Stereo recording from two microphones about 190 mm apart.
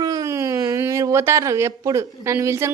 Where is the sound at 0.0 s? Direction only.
20° right (ahead or behind).